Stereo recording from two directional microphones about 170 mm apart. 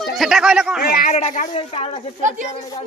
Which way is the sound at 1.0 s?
45° left (ahead or behind).